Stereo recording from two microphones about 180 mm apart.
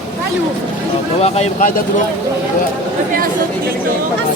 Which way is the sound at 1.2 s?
35° left (ahead or behind).